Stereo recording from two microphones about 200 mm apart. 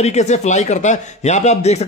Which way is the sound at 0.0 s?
35° left (ahead or behind).